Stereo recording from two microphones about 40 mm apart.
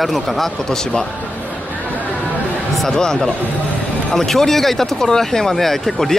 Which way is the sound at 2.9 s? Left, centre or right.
Centre.